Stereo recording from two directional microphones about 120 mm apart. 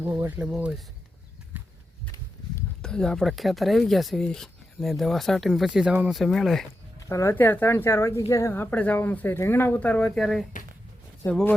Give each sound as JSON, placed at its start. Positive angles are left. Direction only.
{"t": 0.0, "sound": "speech", "side_deg": -20}
{"t": 2.8, "sound": "speech", "side_deg": 5}
{"t": 7.1, "sound": "speech", "side_deg": 25}
{"t": 11.3, "sound": "speech", "side_deg": 10}